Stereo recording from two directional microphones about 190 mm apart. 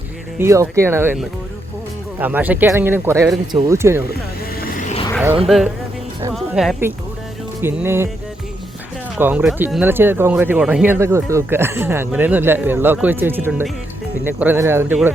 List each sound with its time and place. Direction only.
0.3 s speech: 15° right (ahead or behind)
4.8 s vehicle: 40° left (ahead or behind)
5.5 s speech: centre (ahead or behind)
6.3 s music: centre (ahead or behind)
7.6 s speech: 10° right (ahead or behind)
9.1 s speech: 10° right (ahead or behind)